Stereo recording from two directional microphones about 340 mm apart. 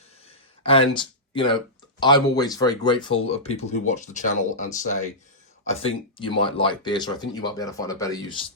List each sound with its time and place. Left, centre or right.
0.6 s speech: centre